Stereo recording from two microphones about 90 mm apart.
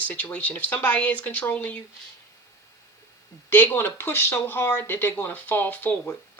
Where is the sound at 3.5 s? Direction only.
20° left (ahead or behind).